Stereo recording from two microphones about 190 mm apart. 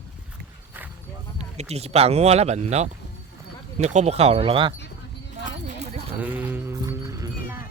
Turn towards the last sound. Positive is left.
turn(degrees=-15)  # may be behind; listen again after turning